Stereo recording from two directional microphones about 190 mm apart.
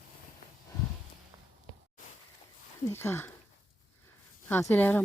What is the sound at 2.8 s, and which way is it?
Speech, 10° left (ahead or behind).